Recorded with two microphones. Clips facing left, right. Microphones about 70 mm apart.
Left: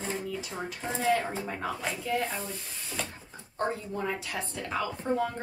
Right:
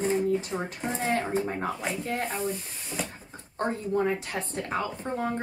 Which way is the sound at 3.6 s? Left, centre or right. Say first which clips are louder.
Right 4 dB; right.